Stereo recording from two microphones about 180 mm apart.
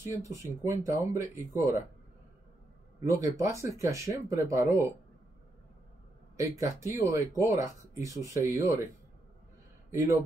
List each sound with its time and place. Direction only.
0.2 s speech: 15° right (ahead or behind)
3.0 s a man's voice: 15° right (ahead or behind)
6.3 s speech: 15° right (ahead or behind)
9.8 s a man's voice: 15° right (ahead or behind)